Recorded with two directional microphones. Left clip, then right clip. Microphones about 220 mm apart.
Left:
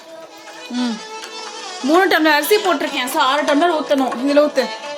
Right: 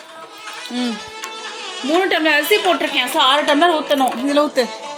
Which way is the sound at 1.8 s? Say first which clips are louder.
Left 3 dB; 25° left (ahead or behind).